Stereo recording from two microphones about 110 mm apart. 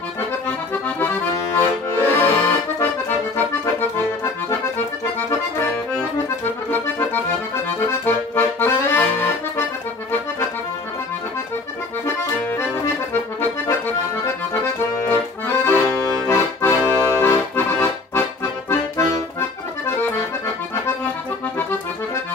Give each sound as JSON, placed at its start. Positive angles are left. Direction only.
{"t": 0.8, "sound": "accordion", "side_deg": 20}
{"t": 7.9, "sound": "accordion", "side_deg": 20}
{"t": 12.5, "sound": "accordion", "side_deg": 20}